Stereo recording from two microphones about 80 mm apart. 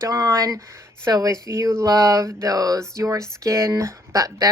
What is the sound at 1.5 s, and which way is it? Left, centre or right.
Speech, right.